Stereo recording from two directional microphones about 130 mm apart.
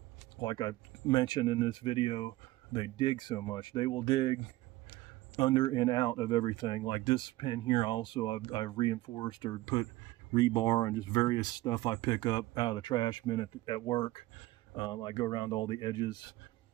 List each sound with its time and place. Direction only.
0.4 s speech: 30° left (ahead or behind)